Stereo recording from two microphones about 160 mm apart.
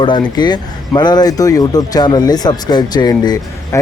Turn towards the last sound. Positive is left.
turn(degrees=25)  # may be behind; listen again after turning